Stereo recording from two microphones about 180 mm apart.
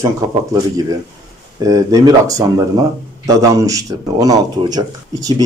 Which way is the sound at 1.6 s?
20° right (ahead or behind).